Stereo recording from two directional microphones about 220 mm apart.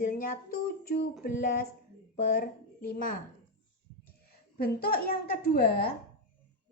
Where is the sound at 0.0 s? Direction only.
40° left (ahead or behind).